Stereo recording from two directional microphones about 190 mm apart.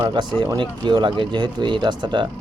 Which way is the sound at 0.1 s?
25° right (ahead or behind).